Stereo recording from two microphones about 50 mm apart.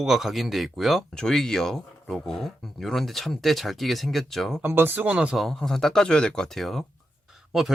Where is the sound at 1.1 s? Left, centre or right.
Centre.